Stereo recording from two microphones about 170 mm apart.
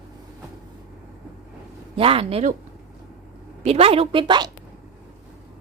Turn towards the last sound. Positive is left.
turn(degrees=-25)  # may be behind; listen again after turning